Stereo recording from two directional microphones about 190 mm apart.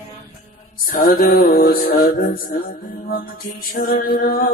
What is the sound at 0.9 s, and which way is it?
Music, 50° left (ahead or behind).